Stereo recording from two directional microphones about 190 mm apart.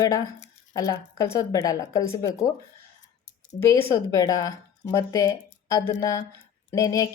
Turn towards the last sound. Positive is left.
turn(degrees=20)  # may be behind; listen again after turning